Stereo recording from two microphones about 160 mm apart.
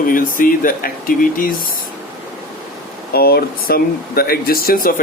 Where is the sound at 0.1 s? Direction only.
60° left (ahead or behind).